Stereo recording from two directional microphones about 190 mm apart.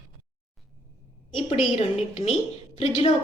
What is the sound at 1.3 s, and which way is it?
Speech, 30° left (ahead or behind).